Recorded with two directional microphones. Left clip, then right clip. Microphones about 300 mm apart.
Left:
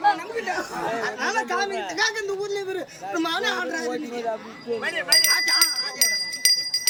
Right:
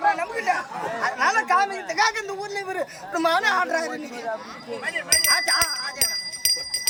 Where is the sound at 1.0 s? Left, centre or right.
Centre.